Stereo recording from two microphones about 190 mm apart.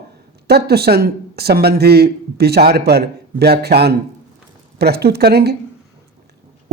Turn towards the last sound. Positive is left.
turn(degrees=-60)  # may be behind; listen again after turning